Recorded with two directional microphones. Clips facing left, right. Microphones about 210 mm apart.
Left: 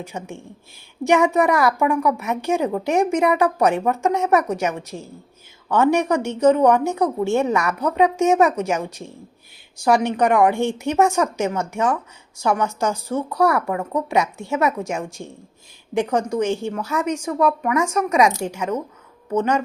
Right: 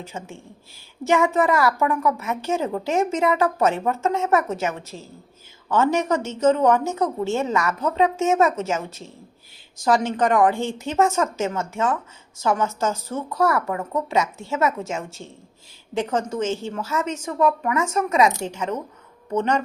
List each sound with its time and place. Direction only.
0.0 s a woman's voice: 15° left (ahead or behind)